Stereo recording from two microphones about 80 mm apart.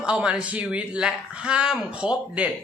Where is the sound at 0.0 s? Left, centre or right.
Centre.